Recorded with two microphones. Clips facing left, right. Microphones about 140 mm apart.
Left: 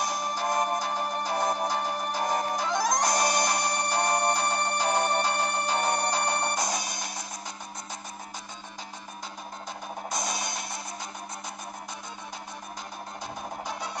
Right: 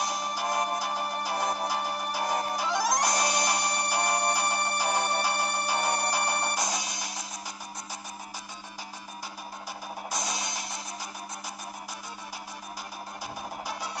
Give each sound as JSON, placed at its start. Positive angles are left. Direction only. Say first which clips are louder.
{"t": 0.3, "sound": "music", "louder": "left 3 dB", "side_deg": -10}
{"t": 3.1, "sound": "music", "louder": "left 2 dB", "side_deg": 50}
{"t": 3.4, "sound": "a sound", "louder": "left 1 dB", "side_deg": -5}
{"t": 4.3, "sound": "music", "louder": "left 2 dB", "side_deg": -5}
{"t": 6.7, "sound": "music", "louder": "left 2 dB", "side_deg": 50}
{"t": 10.1, "sound": "music", "louder": "left 2 dB", "side_deg": 50}
{"t": 13.7, "sound": "music", "louder": "left 1 dB", "side_deg": -5}